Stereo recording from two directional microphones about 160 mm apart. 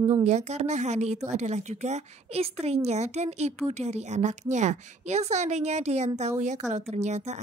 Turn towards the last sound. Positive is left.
turn(degrees=-45)  # may be behind; listen again after turning